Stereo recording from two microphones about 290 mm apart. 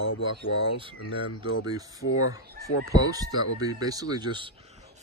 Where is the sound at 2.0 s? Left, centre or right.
Left.